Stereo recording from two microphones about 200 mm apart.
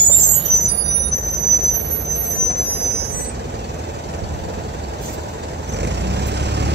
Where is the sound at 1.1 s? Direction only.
60° right (ahead or behind).